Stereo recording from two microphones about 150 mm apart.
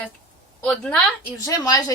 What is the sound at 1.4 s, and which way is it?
Speech, 25° left (ahead or behind).